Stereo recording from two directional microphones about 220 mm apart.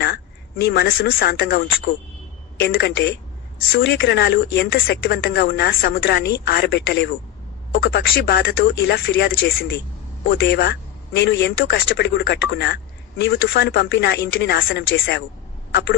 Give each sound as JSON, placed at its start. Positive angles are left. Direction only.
{"t": 0.6, "sound": "speech", "side_deg": 45}